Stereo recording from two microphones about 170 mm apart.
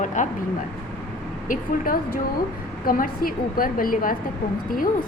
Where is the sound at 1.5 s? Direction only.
60° left (ahead or behind).